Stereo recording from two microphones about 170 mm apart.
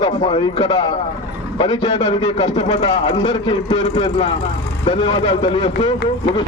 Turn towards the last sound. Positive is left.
turn(degrees=30)  # may be behind; listen again after turning